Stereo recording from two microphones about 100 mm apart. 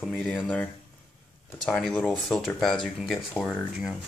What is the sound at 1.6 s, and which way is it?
Speech, 5° left (ahead or behind).